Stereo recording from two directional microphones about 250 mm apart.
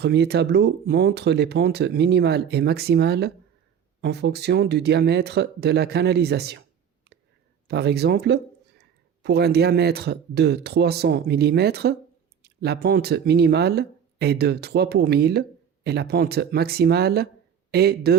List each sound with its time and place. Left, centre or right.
0.0 s speech: right
7.7 s speech: right